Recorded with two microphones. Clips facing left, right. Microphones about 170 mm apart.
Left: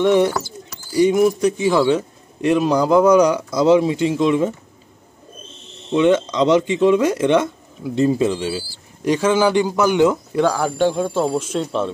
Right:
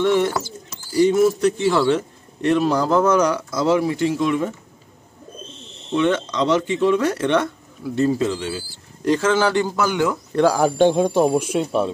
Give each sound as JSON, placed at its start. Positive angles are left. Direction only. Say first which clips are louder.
{"t": 0.0, "sound": "a man's voice", "louder": "left 3 dB", "side_deg": 15}
{"t": 5.9, "sound": "a man's voice", "louder": "left 4 dB", "side_deg": 15}
{"t": 10.4, "sound": "speech", "louder": "right 2 dB", "side_deg": -15}